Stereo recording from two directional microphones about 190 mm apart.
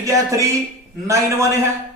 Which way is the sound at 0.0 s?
15° right (ahead or behind).